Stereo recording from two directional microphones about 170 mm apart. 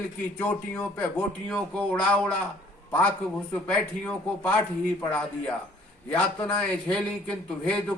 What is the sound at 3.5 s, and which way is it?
Speech, 5° left (ahead or behind).